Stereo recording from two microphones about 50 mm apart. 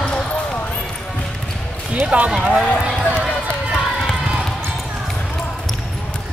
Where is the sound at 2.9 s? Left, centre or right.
Centre.